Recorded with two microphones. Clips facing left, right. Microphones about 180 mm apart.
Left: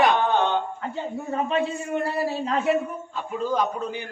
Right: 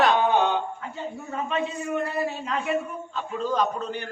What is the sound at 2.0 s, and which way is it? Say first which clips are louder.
Speech: left 3 dB; 30° left (ahead or behind).